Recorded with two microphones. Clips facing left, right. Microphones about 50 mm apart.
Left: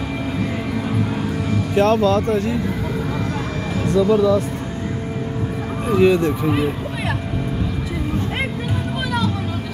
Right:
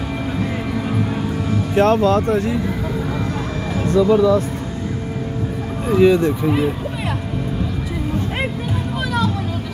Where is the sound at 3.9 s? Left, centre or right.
Right.